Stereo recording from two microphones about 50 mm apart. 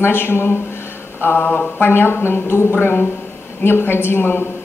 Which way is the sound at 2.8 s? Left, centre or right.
Left.